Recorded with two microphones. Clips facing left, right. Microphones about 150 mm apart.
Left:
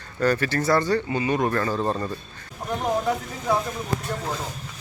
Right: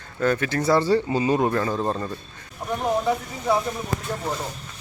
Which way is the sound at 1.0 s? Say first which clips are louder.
Right 3 dB; 30° right (ahead or behind).